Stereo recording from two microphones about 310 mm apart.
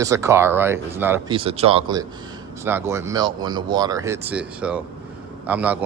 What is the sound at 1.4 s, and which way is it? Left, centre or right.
Speech, centre.